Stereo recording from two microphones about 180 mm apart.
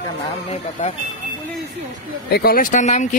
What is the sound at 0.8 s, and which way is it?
Speech, 40° left (ahead or behind).